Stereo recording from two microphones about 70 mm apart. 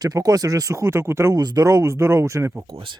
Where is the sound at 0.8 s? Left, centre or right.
Right.